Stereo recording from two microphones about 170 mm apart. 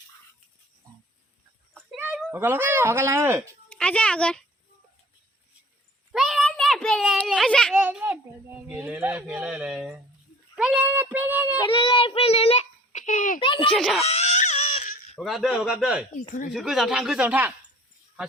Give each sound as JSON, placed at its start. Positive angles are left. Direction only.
{"t": 2.0, "sound": "speech", "side_deg": -10}
{"t": 3.7, "sound": "a child's voice", "side_deg": 5}
{"t": 6.1, "sound": "a sound", "side_deg": 0}
{"t": 7.8, "sound": "speech", "side_deg": -10}
{"t": 11.7, "sound": "a child's voice", "side_deg": 30}
{"t": 13.4, "sound": "speech", "side_deg": 30}
{"t": 13.7, "sound": "speech", "side_deg": 0}
{"t": 14.0, "sound": "crying", "side_deg": 40}
{"t": 15.2, "sound": "speech", "side_deg": 0}